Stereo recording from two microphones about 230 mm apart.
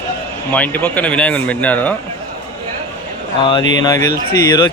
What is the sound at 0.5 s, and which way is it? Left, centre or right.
Speech, centre.